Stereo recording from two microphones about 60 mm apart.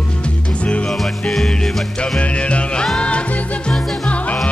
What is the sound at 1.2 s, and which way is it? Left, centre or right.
Music, centre.